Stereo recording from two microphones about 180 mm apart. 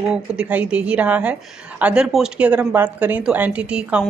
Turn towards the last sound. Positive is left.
turn(degrees=-5)  # may be behind; listen again after turning